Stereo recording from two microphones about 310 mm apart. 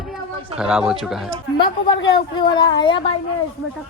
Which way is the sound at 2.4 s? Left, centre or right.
Centre.